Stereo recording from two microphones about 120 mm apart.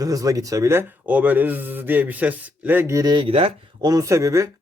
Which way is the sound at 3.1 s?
45° right (ahead or behind).